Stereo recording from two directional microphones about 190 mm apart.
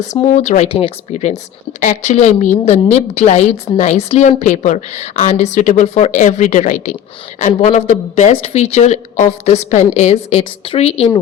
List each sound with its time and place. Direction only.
0.0 s speech: 35° left (ahead or behind)